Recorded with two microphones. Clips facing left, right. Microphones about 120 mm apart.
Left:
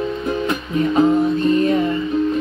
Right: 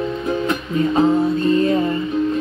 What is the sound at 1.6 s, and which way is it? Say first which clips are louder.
Music: even; 25° right (ahead or behind).